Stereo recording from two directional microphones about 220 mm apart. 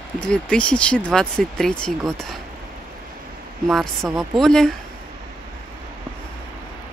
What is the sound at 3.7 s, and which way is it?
Speech, centre (ahead or behind).